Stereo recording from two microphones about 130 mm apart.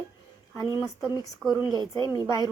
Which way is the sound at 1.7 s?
35° right (ahead or behind).